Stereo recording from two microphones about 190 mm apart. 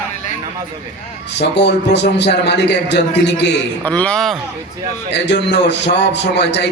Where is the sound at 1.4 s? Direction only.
65° left (ahead or behind).